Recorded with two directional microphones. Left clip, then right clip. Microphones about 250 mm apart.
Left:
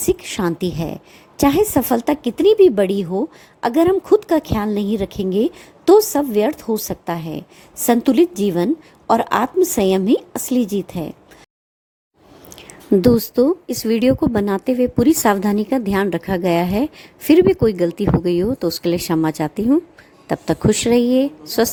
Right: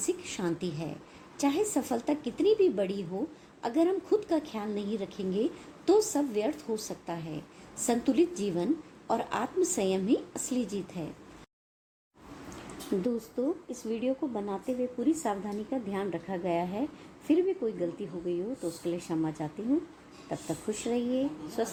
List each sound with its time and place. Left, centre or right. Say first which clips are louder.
0.0 s a woman's voice: left 13 dB; left
13.3 s a woman's voice: left 16 dB; left